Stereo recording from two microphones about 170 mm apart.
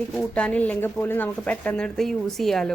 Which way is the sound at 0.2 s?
5° left (ahead or behind).